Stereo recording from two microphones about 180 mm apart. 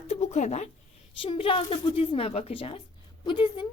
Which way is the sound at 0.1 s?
40° left (ahead or behind).